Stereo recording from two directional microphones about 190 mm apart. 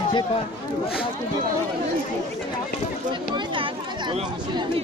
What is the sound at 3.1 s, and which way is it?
Chatter, 25° right (ahead or behind).